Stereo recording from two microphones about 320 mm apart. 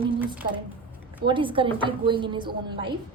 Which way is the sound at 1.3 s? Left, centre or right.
Centre.